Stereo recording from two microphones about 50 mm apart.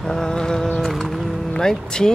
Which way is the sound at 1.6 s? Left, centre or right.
Centre.